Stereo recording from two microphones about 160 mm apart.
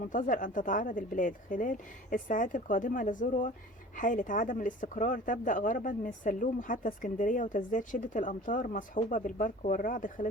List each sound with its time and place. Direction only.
0.0 s speech: 55° left (ahead or behind)